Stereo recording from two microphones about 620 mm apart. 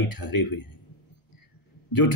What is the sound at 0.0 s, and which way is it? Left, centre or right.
Speech, left.